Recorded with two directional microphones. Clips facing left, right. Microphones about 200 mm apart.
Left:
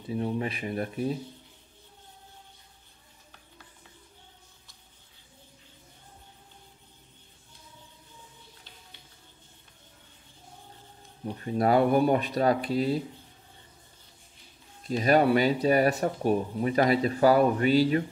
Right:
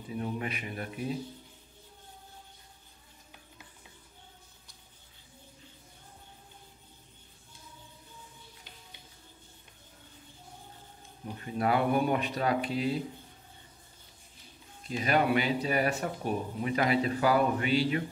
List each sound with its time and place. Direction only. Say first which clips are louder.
0.1 s speech: left 5 dB; 30° left (ahead or behind)
11.4 s speech: left 5 dB; 40° left (ahead or behind)
14.9 s speech: left 5 dB; 40° left (ahead or behind)